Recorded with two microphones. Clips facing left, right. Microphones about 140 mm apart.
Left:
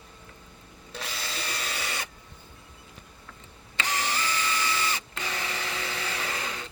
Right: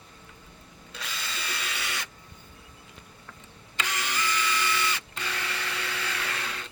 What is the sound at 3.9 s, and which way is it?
Printer, 35° left (ahead or behind).